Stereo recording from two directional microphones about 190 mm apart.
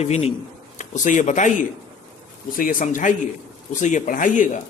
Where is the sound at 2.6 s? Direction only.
45° left (ahead or behind).